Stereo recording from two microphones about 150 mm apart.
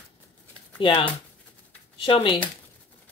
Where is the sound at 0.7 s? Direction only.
35° left (ahead or behind).